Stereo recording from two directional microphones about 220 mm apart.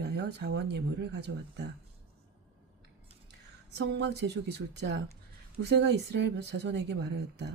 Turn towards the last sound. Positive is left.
turn(degrees=-50)  # may be behind; listen again after turning